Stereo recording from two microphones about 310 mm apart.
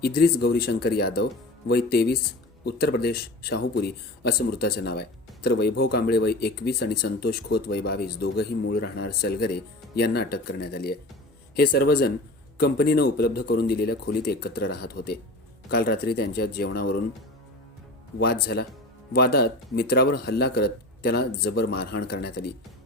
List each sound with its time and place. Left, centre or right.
0.0 s speech: left
18.2 s speech: left